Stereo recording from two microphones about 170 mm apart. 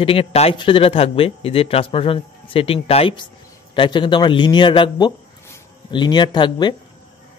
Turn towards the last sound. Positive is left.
turn(degrees=25)  # may be behind; listen again after turning